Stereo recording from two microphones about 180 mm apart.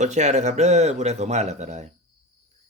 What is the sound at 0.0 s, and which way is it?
Speech, 40° right (ahead or behind).